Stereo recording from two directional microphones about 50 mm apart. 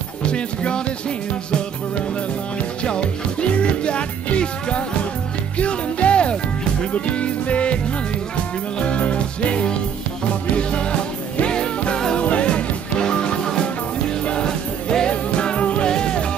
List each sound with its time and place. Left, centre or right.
0.3 s music: left
2.8 s music: centre